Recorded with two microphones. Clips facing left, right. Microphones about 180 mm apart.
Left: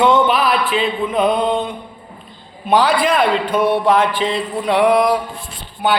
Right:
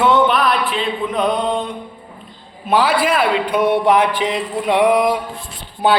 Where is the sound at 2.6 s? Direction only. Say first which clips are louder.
Left 1 dB; 5° right (ahead or behind).